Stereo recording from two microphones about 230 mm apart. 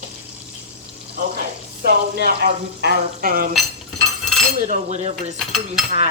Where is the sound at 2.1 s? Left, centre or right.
Right.